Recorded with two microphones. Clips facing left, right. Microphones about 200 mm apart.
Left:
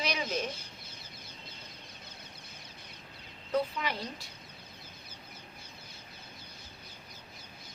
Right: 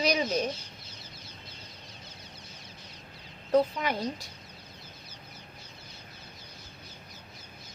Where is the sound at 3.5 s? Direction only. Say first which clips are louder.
Right 6 dB; 45° right (ahead or behind).